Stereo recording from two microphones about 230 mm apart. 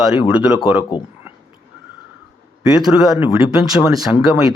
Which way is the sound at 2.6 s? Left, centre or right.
Centre.